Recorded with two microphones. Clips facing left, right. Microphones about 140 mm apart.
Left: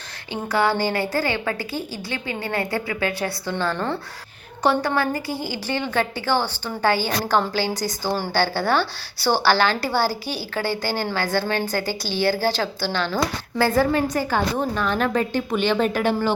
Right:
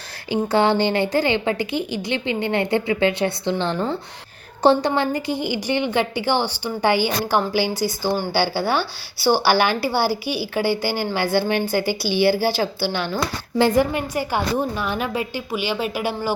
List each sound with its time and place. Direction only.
0.5 s a woman's voice: 25° right (ahead or behind); by 16.3 s 10° right (ahead or behind)